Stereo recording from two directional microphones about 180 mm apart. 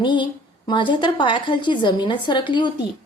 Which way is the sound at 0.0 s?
25° left (ahead or behind).